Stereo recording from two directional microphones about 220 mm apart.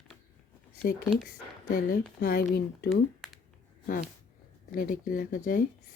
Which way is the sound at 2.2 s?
45° left (ahead or behind).